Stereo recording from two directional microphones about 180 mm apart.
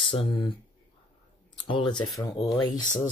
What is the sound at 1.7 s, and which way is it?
Speech, 25° left (ahead or behind).